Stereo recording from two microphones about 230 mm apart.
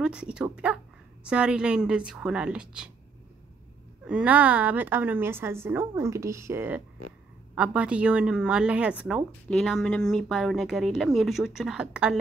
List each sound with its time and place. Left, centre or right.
0.0 s a woman's voice: centre
4.0 s a woman's voice: centre